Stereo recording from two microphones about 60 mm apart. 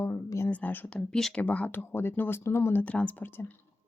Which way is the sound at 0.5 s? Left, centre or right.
Left.